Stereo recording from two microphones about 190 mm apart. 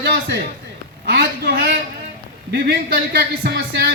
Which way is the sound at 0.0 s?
60° right (ahead or behind).